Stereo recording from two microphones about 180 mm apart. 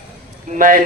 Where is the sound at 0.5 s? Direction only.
50° right (ahead or behind).